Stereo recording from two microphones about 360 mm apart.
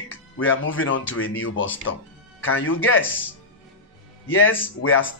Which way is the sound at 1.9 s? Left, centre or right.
Left.